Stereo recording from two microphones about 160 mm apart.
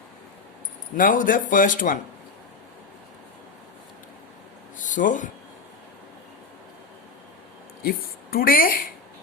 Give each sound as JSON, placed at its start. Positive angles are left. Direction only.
{"t": 0.9, "sound": "speech", "side_deg": 55}
{"t": 4.8, "sound": "speech", "side_deg": 55}
{"t": 7.8, "sound": "a woman's voice", "side_deg": 70}